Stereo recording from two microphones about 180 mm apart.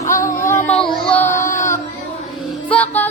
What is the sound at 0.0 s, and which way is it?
Music, 15° left (ahead or behind).